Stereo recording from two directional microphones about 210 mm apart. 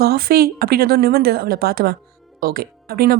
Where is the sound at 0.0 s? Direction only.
45° right (ahead or behind).